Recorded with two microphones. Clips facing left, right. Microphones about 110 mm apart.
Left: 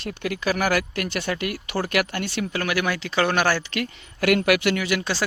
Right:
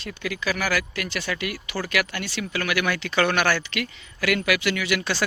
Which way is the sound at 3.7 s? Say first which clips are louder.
Left 2 dB; 45° left (ahead or behind).